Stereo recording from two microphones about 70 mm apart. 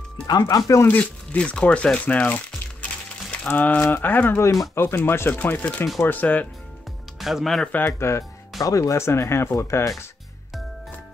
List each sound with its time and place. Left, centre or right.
0.3 s speech: left
0.8 s crumpling: left
3.4 s speech: left
7.2 s speech: centre
7.6 s speech: left
8.2 s speech: left